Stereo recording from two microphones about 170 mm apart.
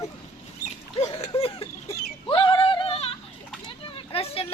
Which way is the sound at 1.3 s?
35° left (ahead or behind).